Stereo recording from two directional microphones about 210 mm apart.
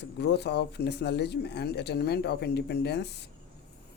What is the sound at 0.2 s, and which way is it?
Speech, 50° left (ahead or behind).